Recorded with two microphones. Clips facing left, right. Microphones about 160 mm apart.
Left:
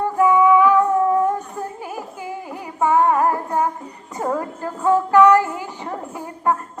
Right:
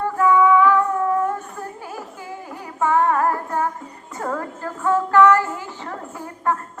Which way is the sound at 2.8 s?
15° left (ahead or behind).